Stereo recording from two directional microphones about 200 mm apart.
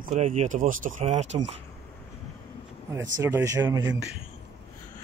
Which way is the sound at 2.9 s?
15° right (ahead or behind).